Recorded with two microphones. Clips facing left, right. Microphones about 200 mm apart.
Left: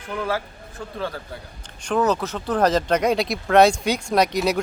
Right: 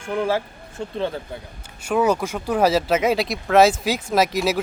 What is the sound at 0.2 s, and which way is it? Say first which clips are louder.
Speech: right 3 dB; 25° right (ahead or behind).